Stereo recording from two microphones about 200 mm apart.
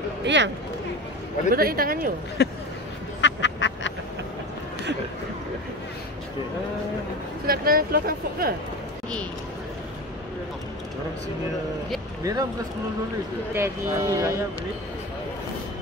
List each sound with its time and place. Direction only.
0.2 s speech: 60° right (ahead or behind)
1.5 s speech: 45° right (ahead or behind)
2.4 s speech: 55° left (ahead or behind)
3.2 s duck: 65° left (ahead or behind)
7.4 s speech: 50° right (ahead or behind)
12.2 s speech: 20° right (ahead or behind)
13.6 s speech: 15° right (ahead or behind)